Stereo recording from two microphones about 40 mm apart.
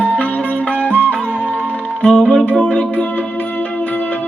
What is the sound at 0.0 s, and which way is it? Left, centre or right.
Music, left.